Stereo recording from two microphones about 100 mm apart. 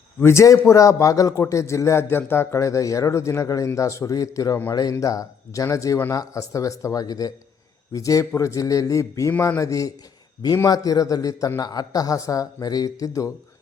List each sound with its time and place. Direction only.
0.2 s a man's voice: 25° left (ahead or behind)